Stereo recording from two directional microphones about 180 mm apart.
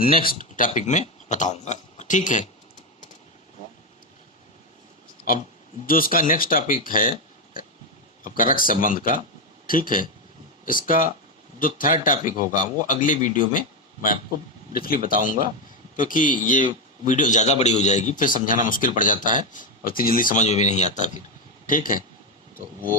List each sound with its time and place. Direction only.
0.0 s speech: 55° left (ahead or behind)
5.8 s speech: 50° left (ahead or behind)
8.2 s speech: 50° left (ahead or behind)